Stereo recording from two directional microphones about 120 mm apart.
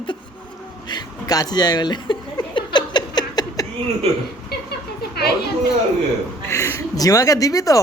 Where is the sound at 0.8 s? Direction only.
35° left (ahead or behind).